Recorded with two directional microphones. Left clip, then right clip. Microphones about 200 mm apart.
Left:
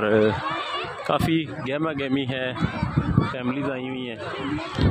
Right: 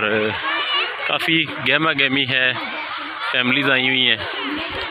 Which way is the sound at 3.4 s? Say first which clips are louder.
Right 11 dB; centre (ahead or behind).